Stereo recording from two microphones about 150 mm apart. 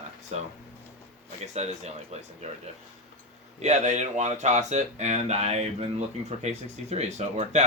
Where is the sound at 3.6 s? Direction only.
50° right (ahead or behind).